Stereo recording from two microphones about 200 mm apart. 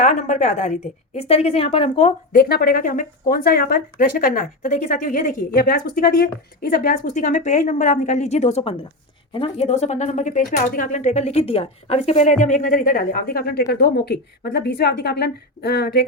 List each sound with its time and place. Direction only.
0.0 s a woman's voice: 35° left (ahead or behind)
2.3 s a woman's voice: 50° left (ahead or behind)